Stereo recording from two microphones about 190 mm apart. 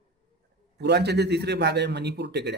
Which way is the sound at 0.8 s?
60° right (ahead or behind).